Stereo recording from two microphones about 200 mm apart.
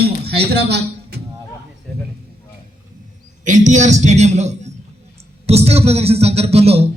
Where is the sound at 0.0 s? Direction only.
55° right (ahead or behind).